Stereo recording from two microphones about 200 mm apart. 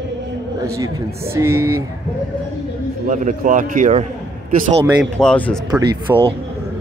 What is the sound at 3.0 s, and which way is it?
A man's voice, 40° right (ahead or behind).